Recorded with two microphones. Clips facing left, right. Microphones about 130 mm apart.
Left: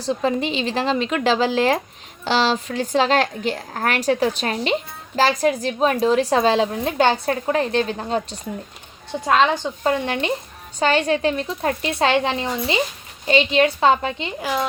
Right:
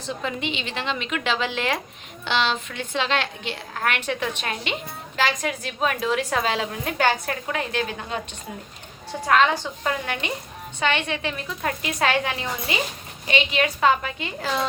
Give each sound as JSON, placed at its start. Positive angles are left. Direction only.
{"t": 0.0, "sound": "speech", "side_deg": 35}
{"t": 9.2, "sound": "a woman's voice", "side_deg": 20}
{"t": 14.4, "sound": "a woman's voice", "side_deg": 10}